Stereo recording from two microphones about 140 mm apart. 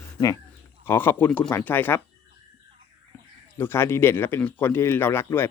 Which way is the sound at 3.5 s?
15° left (ahead or behind).